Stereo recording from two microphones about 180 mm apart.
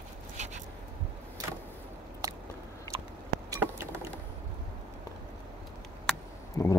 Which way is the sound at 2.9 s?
20° right (ahead or behind).